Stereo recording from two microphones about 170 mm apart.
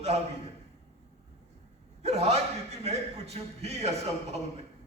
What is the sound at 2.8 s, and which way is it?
A man's voice, 40° right (ahead or behind).